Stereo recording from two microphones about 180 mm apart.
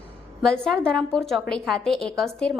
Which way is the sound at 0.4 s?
5° left (ahead or behind).